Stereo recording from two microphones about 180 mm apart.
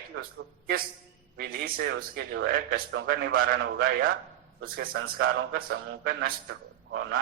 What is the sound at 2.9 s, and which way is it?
A man's voice, 70° right (ahead or behind).